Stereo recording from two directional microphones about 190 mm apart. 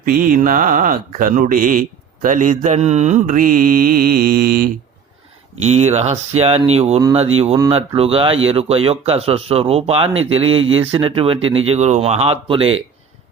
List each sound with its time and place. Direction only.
0.0 s speech: 45° right (ahead or behind)
5.6 s speech: 35° right (ahead or behind)